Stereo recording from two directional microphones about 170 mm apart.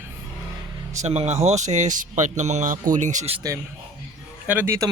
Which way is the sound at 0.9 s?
40° right (ahead or behind).